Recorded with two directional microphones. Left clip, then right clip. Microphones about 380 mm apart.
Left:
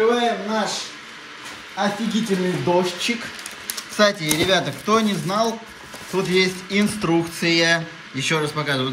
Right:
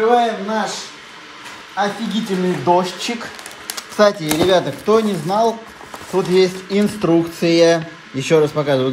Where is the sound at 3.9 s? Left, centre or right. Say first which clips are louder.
Right 4 dB; centre.